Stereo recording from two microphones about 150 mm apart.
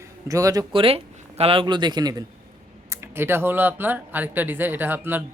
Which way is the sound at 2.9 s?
15° right (ahead or behind).